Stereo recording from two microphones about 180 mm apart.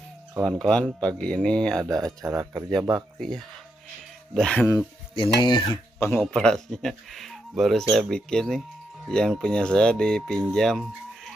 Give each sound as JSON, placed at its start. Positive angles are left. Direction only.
{"t": 0.3, "sound": "speech", "side_deg": -15}
{"t": 0.6, "sound": "speech", "side_deg": 5}
{"t": 1.9, "sound": "speech", "side_deg": -20}
{"t": 3.2, "sound": "speech", "side_deg": 5}
{"t": 5.1, "sound": "speech", "side_deg": 25}
{"t": 6.1, "sound": "speech", "side_deg": 5}